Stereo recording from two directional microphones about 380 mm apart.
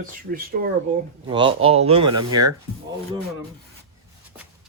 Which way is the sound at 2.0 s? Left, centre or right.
Right.